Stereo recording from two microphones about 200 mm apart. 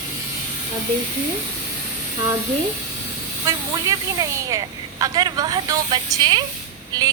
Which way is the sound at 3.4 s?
15° right (ahead or behind).